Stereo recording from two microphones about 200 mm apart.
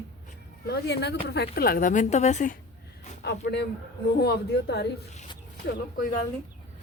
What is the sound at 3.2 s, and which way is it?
Speech, 60° left (ahead or behind).